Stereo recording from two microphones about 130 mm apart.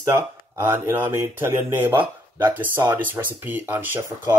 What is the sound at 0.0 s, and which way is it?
Speech, 20° right (ahead or behind).